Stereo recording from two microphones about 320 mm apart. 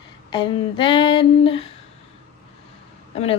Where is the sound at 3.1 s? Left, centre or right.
Centre.